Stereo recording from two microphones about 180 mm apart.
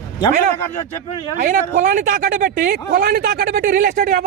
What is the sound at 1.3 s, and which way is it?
Speech, 55° right (ahead or behind).